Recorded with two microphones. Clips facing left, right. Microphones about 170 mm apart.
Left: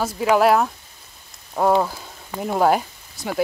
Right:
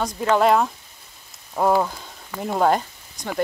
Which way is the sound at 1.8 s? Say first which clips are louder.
Left 1 dB; 5° left (ahead or behind).